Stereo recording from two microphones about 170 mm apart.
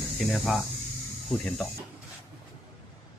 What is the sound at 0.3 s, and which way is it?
Speech, centre (ahead or behind).